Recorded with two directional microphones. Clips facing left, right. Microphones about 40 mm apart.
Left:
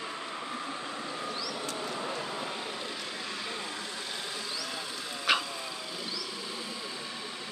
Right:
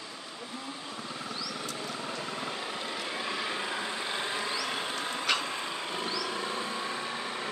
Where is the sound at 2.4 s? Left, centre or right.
Centre.